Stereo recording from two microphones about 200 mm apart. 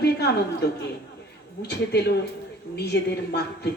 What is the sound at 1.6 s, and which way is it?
Speech, 55° left (ahead or behind).